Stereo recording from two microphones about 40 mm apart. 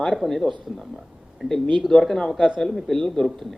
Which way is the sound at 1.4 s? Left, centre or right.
Centre.